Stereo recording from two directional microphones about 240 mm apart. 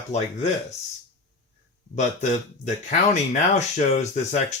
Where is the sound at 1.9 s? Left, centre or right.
Left.